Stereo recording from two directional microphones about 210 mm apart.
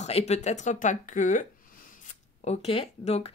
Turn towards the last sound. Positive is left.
turn(degrees=30)  # may be behind; listen again after turning